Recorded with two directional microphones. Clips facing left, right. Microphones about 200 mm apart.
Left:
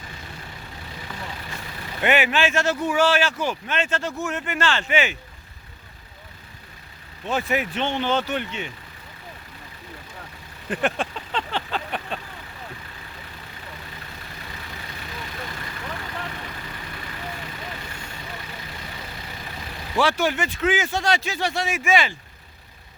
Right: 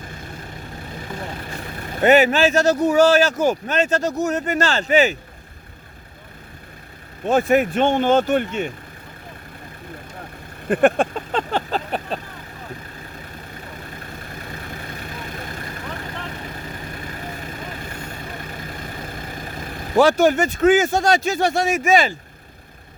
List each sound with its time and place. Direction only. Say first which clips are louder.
1.0 s speech: right 5 dB; 50° right (ahead or behind)
7.3 s speech: right 8 dB; 45° right (ahead or behind)
10.7 s speech: right 9 dB; 50° right (ahead or behind)
13.7 s vehicle: right 5 dB; 50° right (ahead or behind)